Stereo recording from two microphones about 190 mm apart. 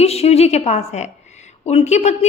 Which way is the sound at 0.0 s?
35° left (ahead or behind).